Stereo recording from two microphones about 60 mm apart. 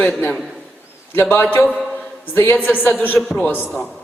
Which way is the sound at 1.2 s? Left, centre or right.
Left.